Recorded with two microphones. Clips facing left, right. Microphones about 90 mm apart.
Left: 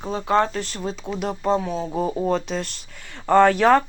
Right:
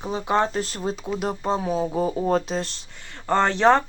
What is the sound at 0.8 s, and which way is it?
Speech, 5° right (ahead or behind).